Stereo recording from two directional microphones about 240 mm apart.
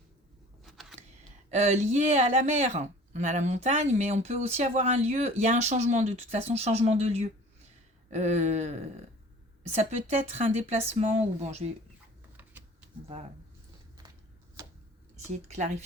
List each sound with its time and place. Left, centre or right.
0.6 s a sound: centre
1.5 s speech: right
15.4 s speech: right